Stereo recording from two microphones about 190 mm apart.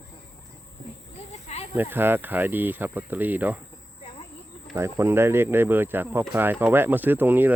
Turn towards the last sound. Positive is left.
turn(degrees=-10)  # may be behind; listen again after turning